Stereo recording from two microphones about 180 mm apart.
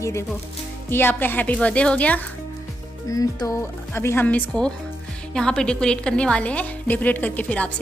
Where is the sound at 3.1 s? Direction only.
20° left (ahead or behind).